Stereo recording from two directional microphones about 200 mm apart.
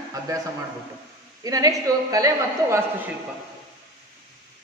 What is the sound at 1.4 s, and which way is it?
A man's voice, 15° right (ahead or behind).